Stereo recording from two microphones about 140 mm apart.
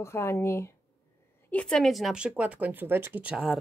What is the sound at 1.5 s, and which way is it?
Speech, 10° left (ahead or behind).